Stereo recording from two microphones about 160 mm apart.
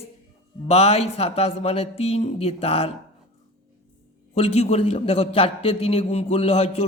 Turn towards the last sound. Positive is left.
turn(degrees=40)  # may be behind; listen again after turning